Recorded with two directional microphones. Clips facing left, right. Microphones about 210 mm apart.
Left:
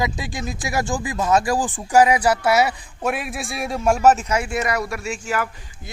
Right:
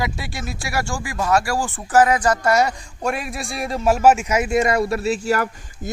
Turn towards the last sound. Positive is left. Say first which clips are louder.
# right 5 dB
turn(degrees=-40)  # may be behind; listen again after turning